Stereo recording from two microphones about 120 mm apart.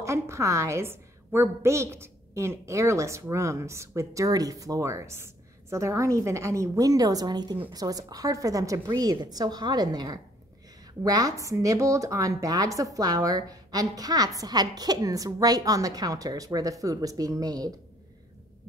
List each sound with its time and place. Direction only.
0.0 s a woman's voice: 25° right (ahead or behind)